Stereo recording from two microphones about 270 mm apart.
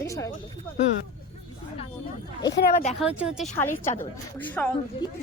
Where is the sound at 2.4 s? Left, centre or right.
Left.